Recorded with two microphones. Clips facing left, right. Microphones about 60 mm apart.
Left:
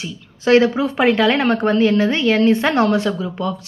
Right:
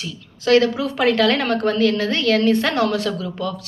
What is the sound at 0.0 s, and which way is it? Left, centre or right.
A woman's voice, left.